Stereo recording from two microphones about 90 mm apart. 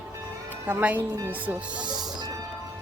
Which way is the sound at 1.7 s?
55° right (ahead or behind).